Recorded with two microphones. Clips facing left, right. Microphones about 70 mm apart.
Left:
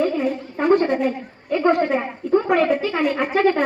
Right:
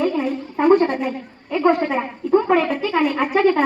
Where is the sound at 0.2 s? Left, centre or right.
Centre.